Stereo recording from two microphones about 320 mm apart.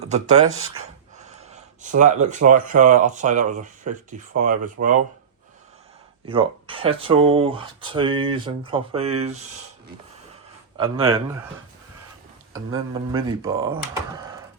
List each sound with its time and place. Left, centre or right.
0.0 s speech: right
1.8 s speech: right
6.2 s speech: centre
10.8 s speech: centre
12.9 s speech: centre
14.2 s a sound: centre